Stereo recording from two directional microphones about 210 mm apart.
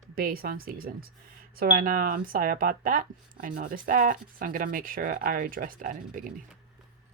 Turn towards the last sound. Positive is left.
turn(degrees=-40)  # may be behind; listen again after turning